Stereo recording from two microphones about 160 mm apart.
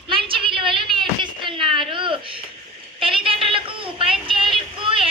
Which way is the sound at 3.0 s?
35° right (ahead or behind).